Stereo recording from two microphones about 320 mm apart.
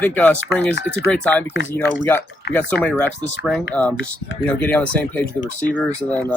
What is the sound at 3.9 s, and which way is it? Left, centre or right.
Speech, left.